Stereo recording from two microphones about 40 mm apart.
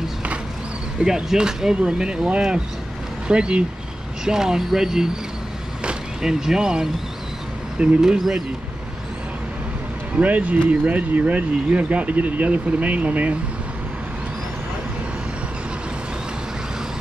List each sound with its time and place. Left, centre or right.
0.9 s speech: right
4.2 s speech: centre
7.8 s speech: right
10.1 s speech: right